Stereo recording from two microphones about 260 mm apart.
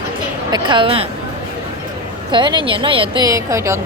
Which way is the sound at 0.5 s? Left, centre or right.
Centre.